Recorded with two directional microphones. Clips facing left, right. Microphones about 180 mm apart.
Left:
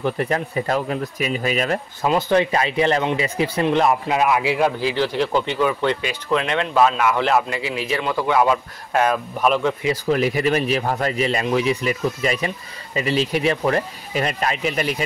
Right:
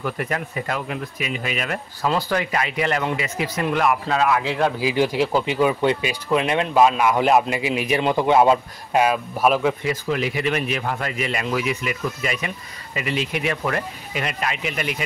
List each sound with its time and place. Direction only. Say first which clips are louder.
0.0 s speech: left 4 dB; 30° left (ahead or behind)
2.0 s speech: left 4 dB; 20° left (ahead or behind)
4.1 s speech: left 2 dB; 15° left (ahead or behind)
4.7 s speech: right 1 dB; 10° right (ahead or behind)
8.9 s speech: even; 10° right (ahead or behind)
10.0 s speech: left 5 dB; 40° left (ahead or behind)